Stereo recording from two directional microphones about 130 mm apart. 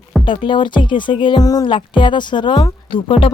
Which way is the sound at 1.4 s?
25° left (ahead or behind).